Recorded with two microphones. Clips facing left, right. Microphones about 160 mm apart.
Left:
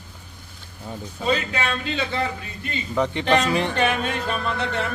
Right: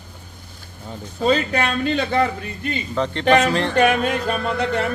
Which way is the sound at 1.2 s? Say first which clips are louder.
Right 5 dB; 40° right (ahead or behind).